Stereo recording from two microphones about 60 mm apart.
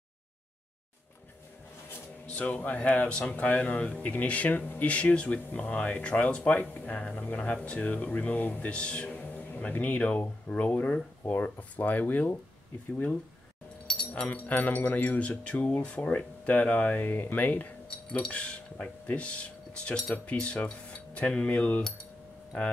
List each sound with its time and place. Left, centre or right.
2.2 s speech: left
13.8 s keys jangling: left
14.5 s speech: left
17.8 s speech: centre